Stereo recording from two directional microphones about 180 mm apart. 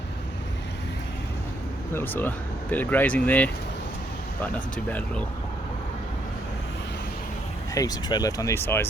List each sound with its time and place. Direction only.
1.9 s speech: 10° left (ahead or behind)
4.9 s speech: 10° left (ahead or behind)
7.7 s speech: 20° left (ahead or behind)